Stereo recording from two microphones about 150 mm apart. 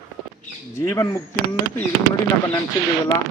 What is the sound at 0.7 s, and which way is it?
Speech, 20° left (ahead or behind).